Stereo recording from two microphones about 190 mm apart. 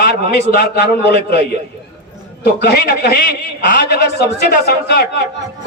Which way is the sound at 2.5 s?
55° left (ahead or behind).